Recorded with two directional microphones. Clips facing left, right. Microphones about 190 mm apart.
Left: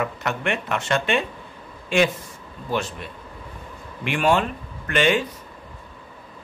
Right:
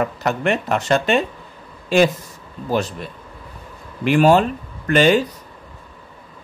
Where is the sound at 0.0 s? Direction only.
35° right (ahead or behind).